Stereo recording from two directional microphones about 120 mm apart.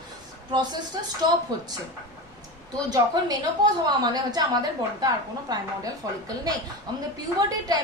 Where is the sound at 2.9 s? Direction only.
35° right (ahead or behind).